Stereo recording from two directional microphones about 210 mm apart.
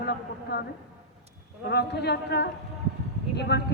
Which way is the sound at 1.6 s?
50° left (ahead or behind).